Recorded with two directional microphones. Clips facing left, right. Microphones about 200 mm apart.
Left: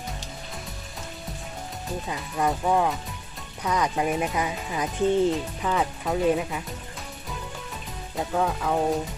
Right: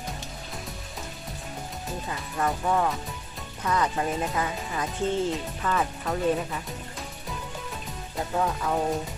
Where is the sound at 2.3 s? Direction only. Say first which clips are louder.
Left 2 dB; 15° left (ahead or behind).